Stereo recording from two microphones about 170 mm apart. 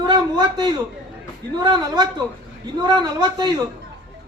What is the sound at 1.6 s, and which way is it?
A man's voice, 25° right (ahead or behind).